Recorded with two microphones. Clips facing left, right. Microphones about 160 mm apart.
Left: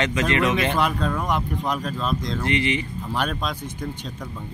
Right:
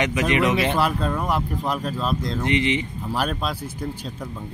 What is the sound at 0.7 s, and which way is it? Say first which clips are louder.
Speech: right 1 dB; 5° right (ahead or behind).